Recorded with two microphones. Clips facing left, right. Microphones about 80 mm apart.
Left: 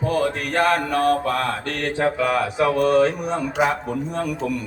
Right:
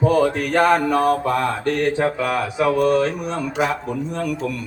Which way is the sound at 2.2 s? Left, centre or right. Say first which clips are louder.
Even; centre.